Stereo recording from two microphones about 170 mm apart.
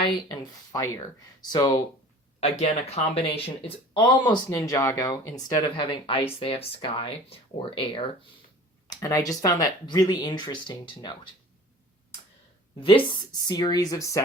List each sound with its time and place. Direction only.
0.0 s speech: 20° left (ahead or behind)
2.4 s speech: 40° left (ahead or behind); by 5.3 s 15° left (ahead or behind)
5.7 s speech: 30° left (ahead or behind)
8.9 s speech: 20° left (ahead or behind)
13.1 s speech: 25° left (ahead or behind)